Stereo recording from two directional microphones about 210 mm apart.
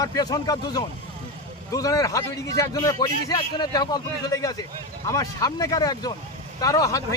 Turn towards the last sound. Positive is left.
turn(degrees=15)  # may be behind; listen again after turning